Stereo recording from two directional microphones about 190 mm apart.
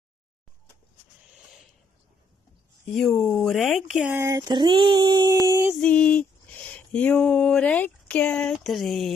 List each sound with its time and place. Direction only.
2.9 s speech: centre (ahead or behind)
4.2 s a sound: 20° right (ahead or behind)
5.8 s speech: 5° left (ahead or behind)